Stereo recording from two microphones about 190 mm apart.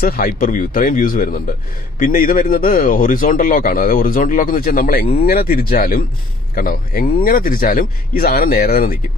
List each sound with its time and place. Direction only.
0.0 s speech: 50° left (ahead or behind)